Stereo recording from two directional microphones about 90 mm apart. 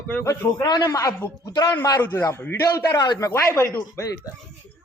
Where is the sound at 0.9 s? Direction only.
40° left (ahead or behind).